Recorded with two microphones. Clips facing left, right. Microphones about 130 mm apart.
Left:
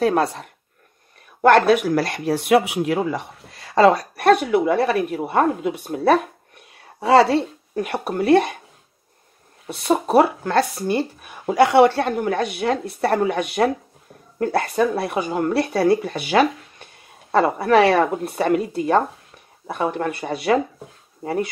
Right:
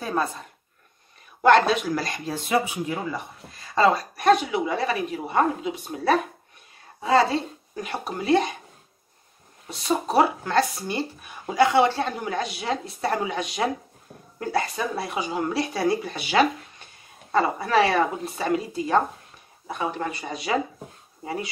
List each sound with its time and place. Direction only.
0.0 s speech: 80° left
1.4 s speech: 60° left (ahead or behind)
7.0 s speech: 70° left (ahead or behind)
9.7 s speech: 60° left (ahead or behind)